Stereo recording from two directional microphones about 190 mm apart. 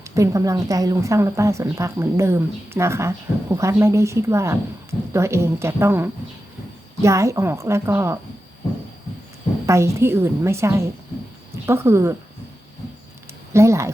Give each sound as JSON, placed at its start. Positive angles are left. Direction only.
{"t": 0.0, "sound": "a woman's voice", "side_deg": -15}
{"t": 9.6, "sound": "a woman's voice", "side_deg": -15}
{"t": 13.5, "sound": "speech", "side_deg": -15}